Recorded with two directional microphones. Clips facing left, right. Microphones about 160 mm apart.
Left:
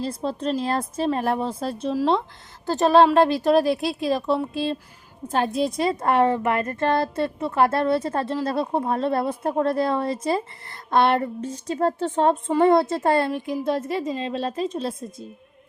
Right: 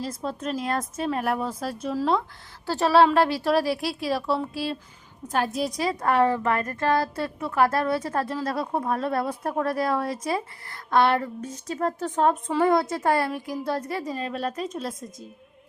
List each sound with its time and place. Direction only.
0.0 s speech: 30° left (ahead or behind)